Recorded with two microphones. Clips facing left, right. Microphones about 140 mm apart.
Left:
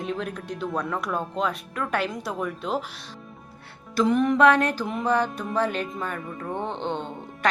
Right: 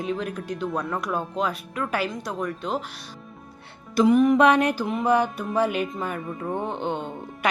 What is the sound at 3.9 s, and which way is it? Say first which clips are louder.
Speech: right 4 dB; 10° right (ahead or behind).